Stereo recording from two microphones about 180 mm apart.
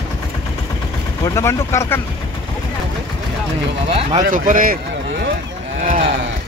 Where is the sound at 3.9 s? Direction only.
35° right (ahead or behind).